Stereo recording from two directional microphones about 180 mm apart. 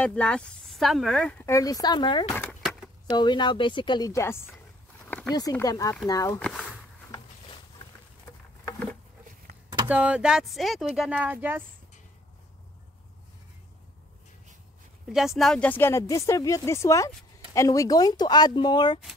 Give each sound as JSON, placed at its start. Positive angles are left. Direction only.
{"t": 0.0, "sound": "speech", "side_deg": 5}
{"t": 1.4, "sound": "a woman's voice", "side_deg": 20}
{"t": 6.4, "sound": "speech", "side_deg": 0}
{"t": 9.8, "sound": "speech", "side_deg": -5}
{"t": 15.0, "sound": "a woman's voice", "side_deg": 0}